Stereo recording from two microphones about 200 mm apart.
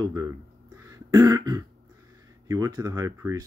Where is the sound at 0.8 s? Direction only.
15° right (ahead or behind).